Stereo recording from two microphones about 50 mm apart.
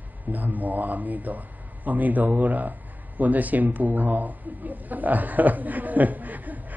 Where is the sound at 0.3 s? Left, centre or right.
Right.